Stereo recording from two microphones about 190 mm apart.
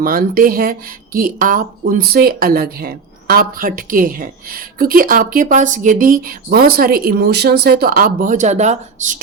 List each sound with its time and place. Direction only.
0.0 s speech: 50° right (ahead or behind)